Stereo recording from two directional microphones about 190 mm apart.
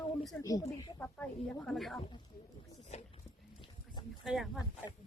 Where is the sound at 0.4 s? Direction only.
20° left (ahead or behind); by 2.0 s centre (ahead or behind).